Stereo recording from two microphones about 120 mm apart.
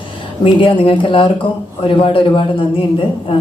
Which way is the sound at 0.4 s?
45° left (ahead or behind).